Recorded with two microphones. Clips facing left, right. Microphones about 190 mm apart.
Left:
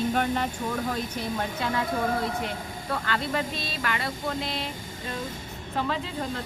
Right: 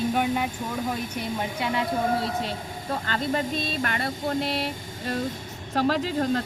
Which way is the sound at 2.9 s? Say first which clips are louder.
Right 2 dB; 35° right (ahead or behind).